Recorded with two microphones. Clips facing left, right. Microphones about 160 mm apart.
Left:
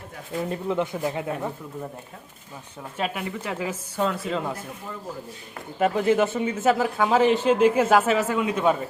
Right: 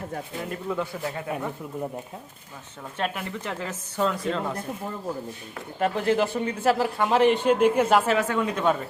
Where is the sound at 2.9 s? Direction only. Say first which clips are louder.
Left 1 dB; 5° left (ahead or behind).